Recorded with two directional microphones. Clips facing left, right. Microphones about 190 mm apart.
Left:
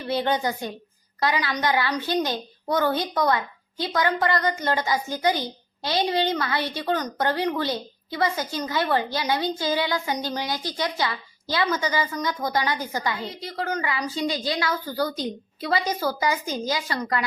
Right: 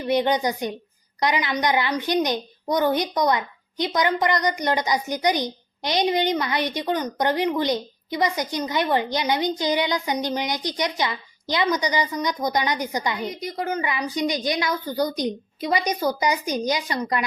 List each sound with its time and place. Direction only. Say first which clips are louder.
0.1 s a child's voice: right 3 dB; 15° right (ahead or behind)